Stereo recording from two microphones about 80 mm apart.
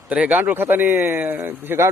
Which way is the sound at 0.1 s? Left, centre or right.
Centre.